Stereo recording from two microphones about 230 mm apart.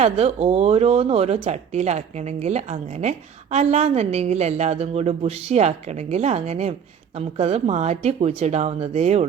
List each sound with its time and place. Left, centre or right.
0.0 s speech: right